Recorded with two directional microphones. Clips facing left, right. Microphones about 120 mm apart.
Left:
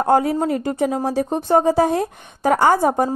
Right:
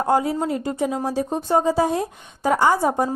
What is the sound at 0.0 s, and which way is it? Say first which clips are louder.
A woman's voice: left 3 dB; 60° left (ahead or behind).